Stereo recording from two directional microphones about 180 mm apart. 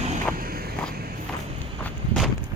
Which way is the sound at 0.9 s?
55° right (ahead or behind).